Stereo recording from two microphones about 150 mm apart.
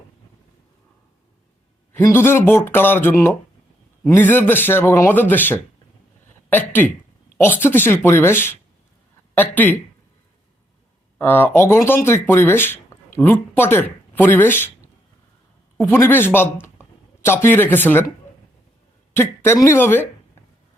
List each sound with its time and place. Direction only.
1.9 s a man's voice: 15° left (ahead or behind)
11.2 s a man's voice: 15° left (ahead or behind)
19.1 s a man's voice: 15° left (ahead or behind)